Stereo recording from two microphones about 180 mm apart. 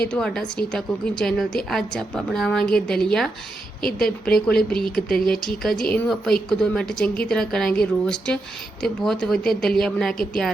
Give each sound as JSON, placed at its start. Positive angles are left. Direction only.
{"t": 0.0, "sound": "a woman's voice", "side_deg": 5}
{"t": 9.5, "sound": "a woman's voice", "side_deg": 0}